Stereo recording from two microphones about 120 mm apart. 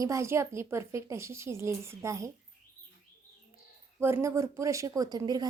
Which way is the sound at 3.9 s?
20° right (ahead or behind).